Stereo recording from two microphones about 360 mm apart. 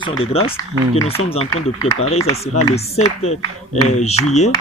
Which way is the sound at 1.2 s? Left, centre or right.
Centre.